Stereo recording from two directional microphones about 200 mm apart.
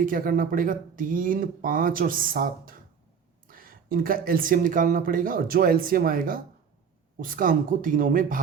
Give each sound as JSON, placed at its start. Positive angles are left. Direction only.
{"t": 0.0, "sound": "speech", "side_deg": -45}